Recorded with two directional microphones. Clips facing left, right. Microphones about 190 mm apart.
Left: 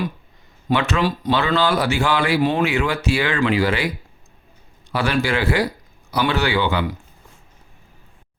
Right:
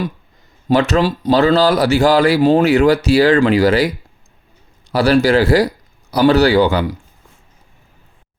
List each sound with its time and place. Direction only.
0.7 s speech: 40° right (ahead or behind)